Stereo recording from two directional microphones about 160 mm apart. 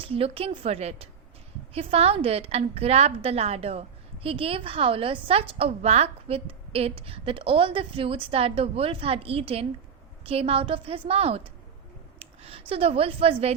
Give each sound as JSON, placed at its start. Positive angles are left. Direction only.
{"t": 0.0, "sound": "a woman's voice", "side_deg": -35}